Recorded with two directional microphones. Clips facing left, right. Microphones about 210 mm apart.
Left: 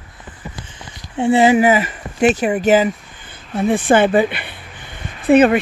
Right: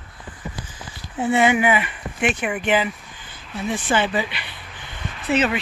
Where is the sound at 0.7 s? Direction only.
25° left (ahead or behind).